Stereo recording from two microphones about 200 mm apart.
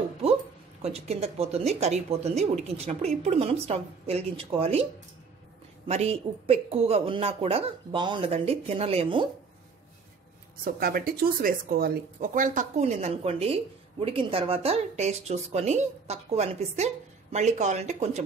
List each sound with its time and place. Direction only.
0.2 s a sound: 30° right (ahead or behind)
0.8 s speech: 30° right (ahead or behind)
5.9 s speech: 30° right (ahead or behind)
10.6 s speech: 45° right (ahead or behind)